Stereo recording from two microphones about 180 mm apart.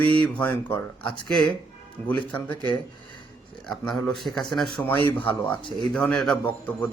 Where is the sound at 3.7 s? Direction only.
5° left (ahead or behind).